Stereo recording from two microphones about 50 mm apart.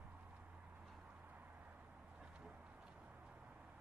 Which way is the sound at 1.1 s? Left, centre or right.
Right.